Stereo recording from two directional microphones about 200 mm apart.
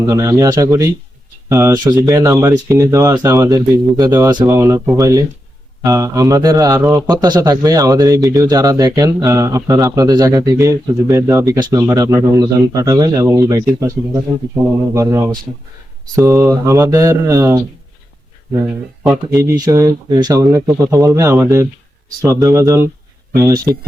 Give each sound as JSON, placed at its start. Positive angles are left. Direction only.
{"t": 0.0, "sound": "a man's voice", "side_deg": -15}
{"t": 19.3, "sound": "a man's voice", "side_deg": -15}